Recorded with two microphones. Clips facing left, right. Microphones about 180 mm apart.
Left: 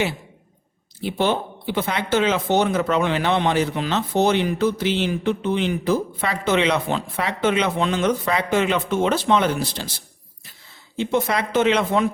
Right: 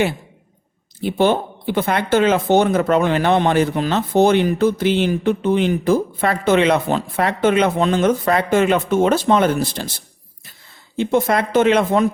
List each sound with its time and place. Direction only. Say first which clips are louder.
1.0 s speech: right 5 dB; 50° right (ahead or behind)
10.9 s speech: right 4 dB; 50° right (ahead or behind)